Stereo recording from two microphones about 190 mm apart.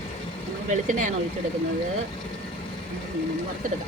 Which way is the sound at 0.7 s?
40° right (ahead or behind).